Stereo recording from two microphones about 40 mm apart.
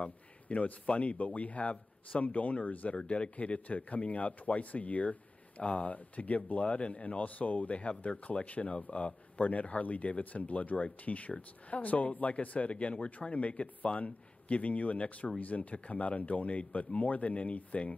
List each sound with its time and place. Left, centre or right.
0.0 s speech: left